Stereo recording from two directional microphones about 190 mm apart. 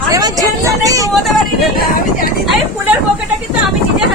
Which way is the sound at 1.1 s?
Centre (ahead or behind).